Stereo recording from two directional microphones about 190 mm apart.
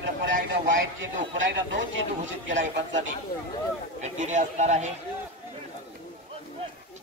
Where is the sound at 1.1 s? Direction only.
70° right (ahead or behind).